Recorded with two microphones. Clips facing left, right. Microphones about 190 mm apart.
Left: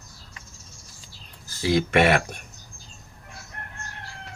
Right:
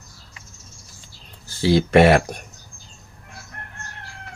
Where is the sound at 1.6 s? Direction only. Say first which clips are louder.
Right 6 dB; 30° right (ahead or behind).